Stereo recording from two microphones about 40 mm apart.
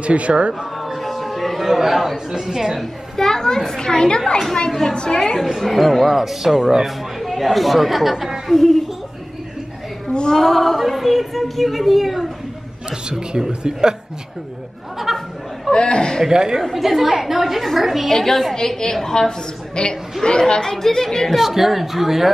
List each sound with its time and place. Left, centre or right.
0.0 s speech: right
0.7 s a sound: centre
1.7 s speech: centre
3.2 s a child's voice: centre
5.8 s speech: centre
10.0 s female singing: centre
10.4 s speech: centre
13.3 s speech: centre
15.1 s speech: centre
15.7 s speech: left
16.3 s a child's voice: centre
21.4 s speech: centre